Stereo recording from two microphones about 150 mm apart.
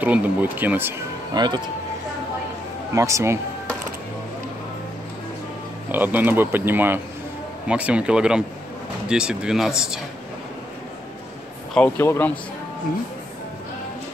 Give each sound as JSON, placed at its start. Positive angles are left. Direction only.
{"t": 0.0, "sound": "a man's voice", "side_deg": -10}
{"t": 1.3, "sound": "a man's voice", "side_deg": -30}
{"t": 2.9, "sound": "a man's voice", "side_deg": -20}
{"t": 5.9, "sound": "a man's voice", "side_deg": -10}
{"t": 11.7, "sound": "speech", "side_deg": 15}